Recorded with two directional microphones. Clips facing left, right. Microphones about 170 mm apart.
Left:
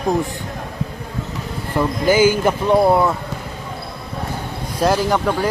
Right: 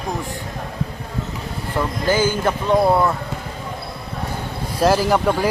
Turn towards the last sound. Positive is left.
turn(degrees=-10)  # may be behind; listen again after turning